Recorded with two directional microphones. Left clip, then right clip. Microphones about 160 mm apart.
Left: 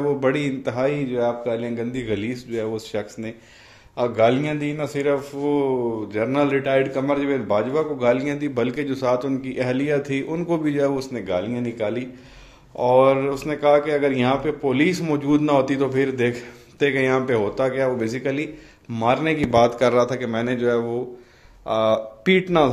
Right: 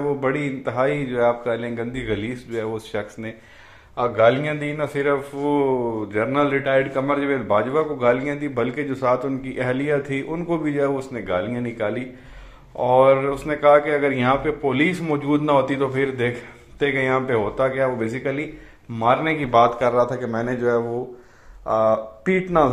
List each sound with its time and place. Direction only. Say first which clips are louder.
0.2 s a man's voice: left 1 dB; 40° left (ahead or behind)
5.5 s a man's voice: right 1 dB; 15° left (ahead or behind); by 10.9 s 35° left (ahead or behind)
10.9 s a man's voice: even; 25° left (ahead or behind)
19.3 s speech: even; 50° left (ahead or behind)
20.0 s a man's voice: even; 20° left (ahead or behind)
20.3 s speech: even; 45° left (ahead or behind)
21.8 s speech: even; 50° left (ahead or behind)